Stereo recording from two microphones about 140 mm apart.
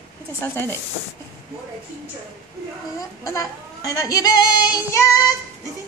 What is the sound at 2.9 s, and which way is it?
Speech, 25° left (ahead or behind).